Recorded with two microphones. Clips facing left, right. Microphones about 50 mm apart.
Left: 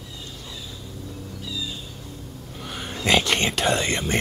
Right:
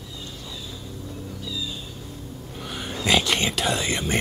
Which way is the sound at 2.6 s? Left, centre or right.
Centre.